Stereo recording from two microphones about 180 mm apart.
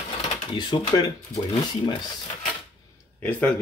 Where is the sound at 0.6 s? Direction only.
25° left (ahead or behind).